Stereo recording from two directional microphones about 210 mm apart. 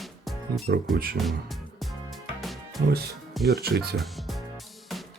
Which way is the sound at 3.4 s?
50° right (ahead or behind).